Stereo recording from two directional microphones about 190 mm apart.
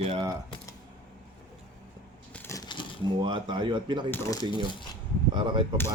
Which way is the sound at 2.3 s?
15° left (ahead or behind).